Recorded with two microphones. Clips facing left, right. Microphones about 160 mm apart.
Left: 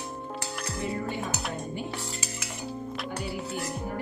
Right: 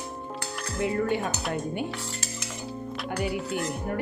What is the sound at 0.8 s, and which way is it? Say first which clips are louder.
Speech: right 7 dB; 65° right (ahead or behind).